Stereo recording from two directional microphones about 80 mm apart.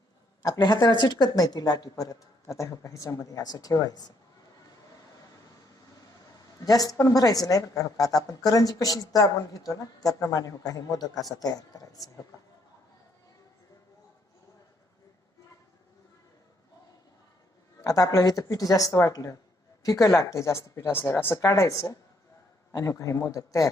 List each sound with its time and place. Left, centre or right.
0.4 s a woman's voice: left
6.6 s a woman's voice: left
17.8 s a woman's voice: left
21.3 s a woman's voice: left